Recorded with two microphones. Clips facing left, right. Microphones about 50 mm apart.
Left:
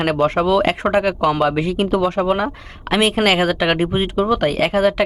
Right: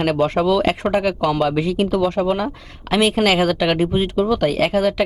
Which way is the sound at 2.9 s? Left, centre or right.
Centre.